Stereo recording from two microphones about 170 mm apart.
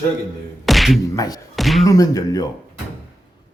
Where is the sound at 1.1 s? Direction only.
20° left (ahead or behind).